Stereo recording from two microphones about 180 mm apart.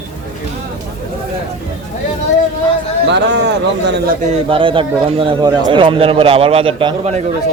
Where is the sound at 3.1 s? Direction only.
75° right (ahead or behind).